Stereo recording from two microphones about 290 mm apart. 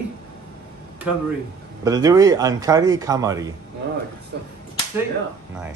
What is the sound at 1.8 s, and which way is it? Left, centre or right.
A man's voice, centre.